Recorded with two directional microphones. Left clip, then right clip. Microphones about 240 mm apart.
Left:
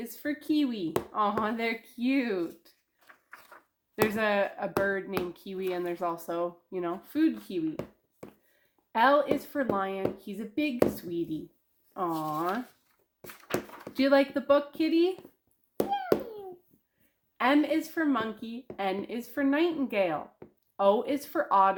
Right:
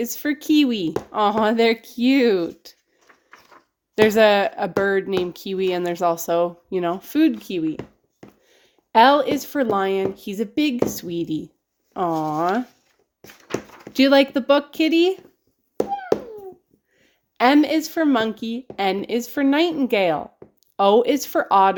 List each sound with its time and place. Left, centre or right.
0.0 s a woman's voice: right
3.1 s a sound: centre
3.9 s a woman's voice: right
8.9 s a woman's voice: right
13.9 s a woman's voice: right
16.1 s a sound: centre
17.3 s a woman's voice: right